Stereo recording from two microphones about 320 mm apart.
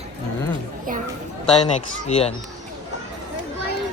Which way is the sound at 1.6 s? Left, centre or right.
Centre.